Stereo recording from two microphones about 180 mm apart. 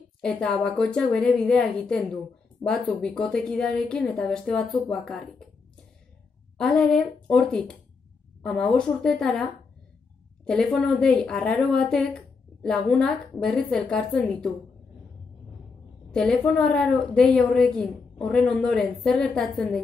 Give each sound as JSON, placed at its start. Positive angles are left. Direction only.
{"t": 0.2, "sound": "a woman's voice", "side_deg": 5}
{"t": 6.6, "sound": "a woman's voice", "side_deg": 5}
{"t": 16.1, "sound": "a woman's voice", "side_deg": 5}